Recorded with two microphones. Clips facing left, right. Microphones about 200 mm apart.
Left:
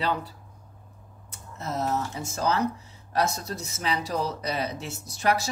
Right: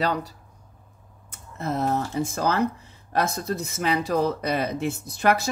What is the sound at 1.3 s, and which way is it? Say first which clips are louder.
Speech: right 4 dB; 55° right (ahead or behind).